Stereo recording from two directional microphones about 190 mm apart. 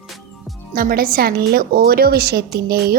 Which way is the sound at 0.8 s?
50° right (ahead or behind).